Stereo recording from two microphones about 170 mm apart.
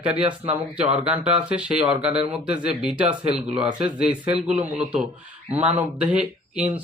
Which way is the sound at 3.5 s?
5° right (ahead or behind).